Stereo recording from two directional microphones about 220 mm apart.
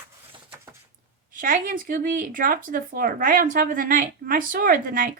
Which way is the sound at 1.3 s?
35° right (ahead or behind).